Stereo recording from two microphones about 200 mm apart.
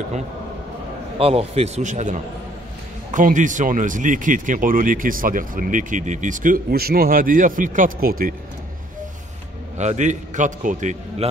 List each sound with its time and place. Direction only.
1.1 s a man's voice: 30° right (ahead or behind); by 8.4 s 45° right (ahead or behind)
9.8 s a man's voice: 35° right (ahead or behind)